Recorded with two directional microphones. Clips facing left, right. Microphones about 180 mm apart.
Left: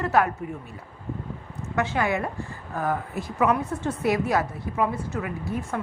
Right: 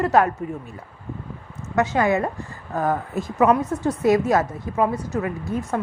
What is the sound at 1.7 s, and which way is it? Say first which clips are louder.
Speech: right 5 dB; 40° right (ahead or behind).